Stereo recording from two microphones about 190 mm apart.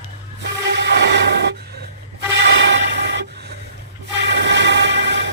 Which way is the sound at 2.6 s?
65° right (ahead or behind).